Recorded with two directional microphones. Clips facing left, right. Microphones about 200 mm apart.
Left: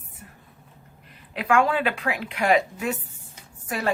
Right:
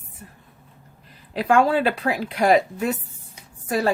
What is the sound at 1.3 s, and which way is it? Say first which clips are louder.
Speech: right 3 dB; 35° right (ahead or behind).